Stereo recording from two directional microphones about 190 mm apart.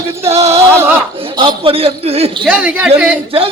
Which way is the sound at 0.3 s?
30° right (ahead or behind).